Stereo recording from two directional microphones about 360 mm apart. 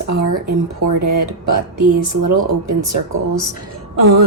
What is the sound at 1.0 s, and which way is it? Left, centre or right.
Speech, right.